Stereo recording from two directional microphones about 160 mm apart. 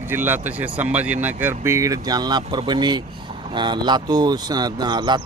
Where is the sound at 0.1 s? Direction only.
10° right (ahead or behind).